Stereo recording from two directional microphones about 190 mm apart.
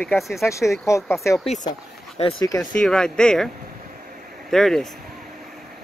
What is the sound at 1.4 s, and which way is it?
Speech, 35° left (ahead or behind).